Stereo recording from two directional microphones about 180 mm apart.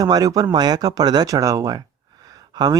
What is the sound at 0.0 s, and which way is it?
Speech, 20° right (ahead or behind).